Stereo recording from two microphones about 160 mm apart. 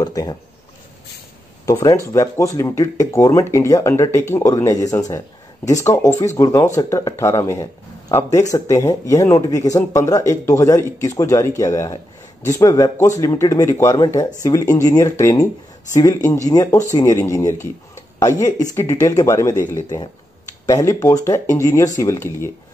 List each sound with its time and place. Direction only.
0.0 s a man's voice: 25° left (ahead or behind)
1.7 s a man's voice: 20° left (ahead or behind)